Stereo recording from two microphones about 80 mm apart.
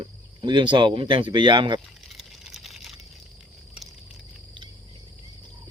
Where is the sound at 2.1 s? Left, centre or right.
Centre.